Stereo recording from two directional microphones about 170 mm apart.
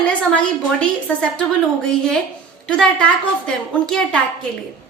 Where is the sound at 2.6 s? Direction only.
5° left (ahead or behind).